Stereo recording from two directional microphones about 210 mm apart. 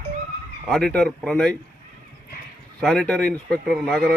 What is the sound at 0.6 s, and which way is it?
Speech, centre (ahead or behind).